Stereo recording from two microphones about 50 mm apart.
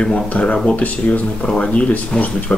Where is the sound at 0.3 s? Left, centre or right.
Left.